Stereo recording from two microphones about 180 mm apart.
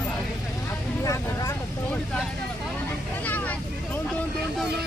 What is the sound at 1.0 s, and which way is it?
Vehicle, 15° left (ahead or behind).